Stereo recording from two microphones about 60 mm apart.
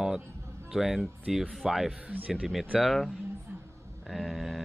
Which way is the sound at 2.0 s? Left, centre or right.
Right.